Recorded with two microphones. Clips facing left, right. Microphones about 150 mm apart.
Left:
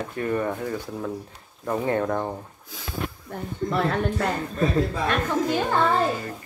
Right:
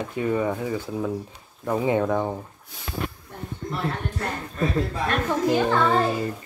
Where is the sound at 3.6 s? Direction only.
90° left.